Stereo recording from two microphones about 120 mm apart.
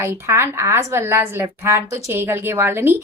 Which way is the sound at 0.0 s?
20° right (ahead or behind).